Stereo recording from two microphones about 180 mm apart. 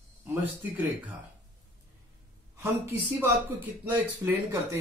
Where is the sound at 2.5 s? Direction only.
15° right (ahead or behind).